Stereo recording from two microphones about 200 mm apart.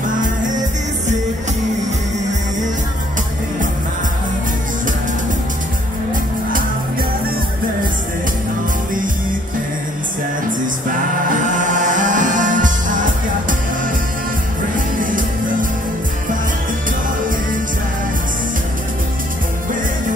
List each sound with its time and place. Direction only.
11.5 s music: 40° right (ahead or behind)
15.0 s music: 40° right (ahead or behind)